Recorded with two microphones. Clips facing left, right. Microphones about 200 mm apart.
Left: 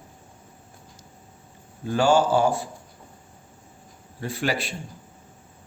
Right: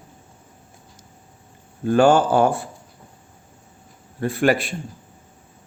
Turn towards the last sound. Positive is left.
turn(degrees=-55)  # may be behind; listen again after turning